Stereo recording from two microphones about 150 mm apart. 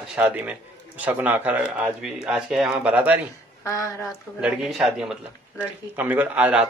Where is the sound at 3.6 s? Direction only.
20° left (ahead or behind).